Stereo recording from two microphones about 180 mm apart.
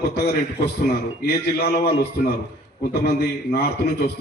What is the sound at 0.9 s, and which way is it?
A man's voice, 60° left (ahead or behind).